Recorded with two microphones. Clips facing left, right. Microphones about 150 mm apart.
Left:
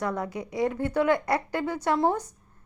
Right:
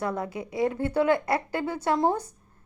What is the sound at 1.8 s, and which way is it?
Speech, 15° right (ahead or behind).